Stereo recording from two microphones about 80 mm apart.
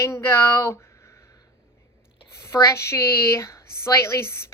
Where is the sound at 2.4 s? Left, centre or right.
Left.